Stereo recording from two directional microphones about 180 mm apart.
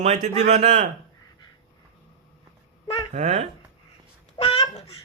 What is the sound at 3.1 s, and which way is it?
Speech, 35° right (ahead or behind).